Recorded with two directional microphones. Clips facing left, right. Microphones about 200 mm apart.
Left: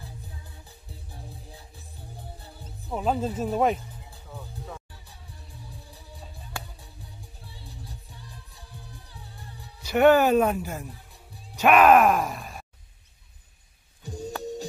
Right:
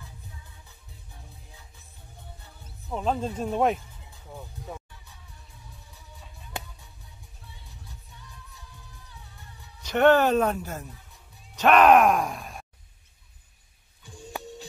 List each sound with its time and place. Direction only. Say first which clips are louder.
0.0 s music: left 4 dB; 35° left (ahead or behind)
2.9 s speech: left 1 dB; 5° left (ahead or behind)
4.9 s music: left 3 dB; 35° left (ahead or behind)
7.4 s music: left 5 dB; 35° left (ahead or behind)
9.8 s speech: left 1 dB; 10° left (ahead or behind)
14.0 s music: left 6 dB; 40° left (ahead or behind)